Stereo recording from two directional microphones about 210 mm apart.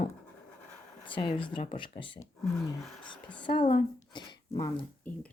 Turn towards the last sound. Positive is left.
turn(degrees=15)  # may be behind; listen again after turning